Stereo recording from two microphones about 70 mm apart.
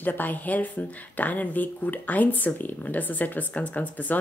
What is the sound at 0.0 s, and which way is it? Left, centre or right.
A woman's voice, left.